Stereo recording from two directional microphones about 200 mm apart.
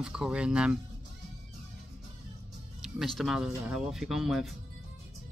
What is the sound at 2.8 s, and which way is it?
Speech, centre (ahead or behind).